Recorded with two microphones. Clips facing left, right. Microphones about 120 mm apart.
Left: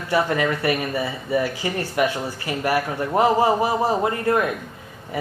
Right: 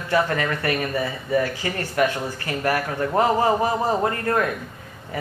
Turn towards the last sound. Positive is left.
turn(degrees=15)  # may be behind; listen again after turning